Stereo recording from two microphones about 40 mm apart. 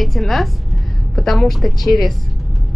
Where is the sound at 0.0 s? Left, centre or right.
Centre.